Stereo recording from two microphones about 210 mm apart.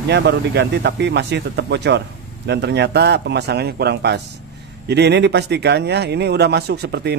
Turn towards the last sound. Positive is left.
turn(degrees=-50)  # may be behind; listen again after turning